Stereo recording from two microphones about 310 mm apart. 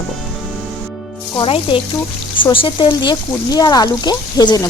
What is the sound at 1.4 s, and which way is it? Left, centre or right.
Speech, centre.